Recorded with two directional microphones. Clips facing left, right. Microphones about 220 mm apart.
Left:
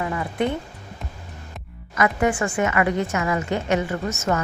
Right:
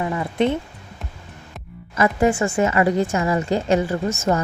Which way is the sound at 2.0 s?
30° right (ahead or behind).